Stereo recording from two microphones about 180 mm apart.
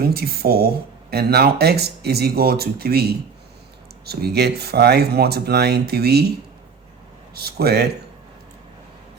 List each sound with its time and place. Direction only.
0.0 s speech: 60° right (ahead or behind)
7.3 s speech: 60° right (ahead or behind)